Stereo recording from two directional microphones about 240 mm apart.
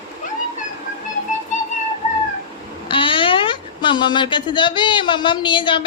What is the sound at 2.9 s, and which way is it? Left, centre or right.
Speech, left.